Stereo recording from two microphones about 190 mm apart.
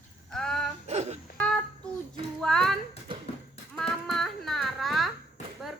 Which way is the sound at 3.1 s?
25° right (ahead or behind).